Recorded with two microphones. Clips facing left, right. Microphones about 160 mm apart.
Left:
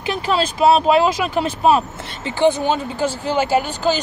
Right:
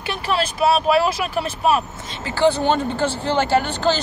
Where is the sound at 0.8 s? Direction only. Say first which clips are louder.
Left 3 dB; 20° left (ahead or behind).